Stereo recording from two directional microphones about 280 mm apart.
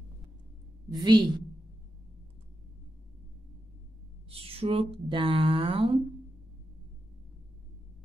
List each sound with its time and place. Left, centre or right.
0.9 s a woman's voice: centre
4.3 s speech: centre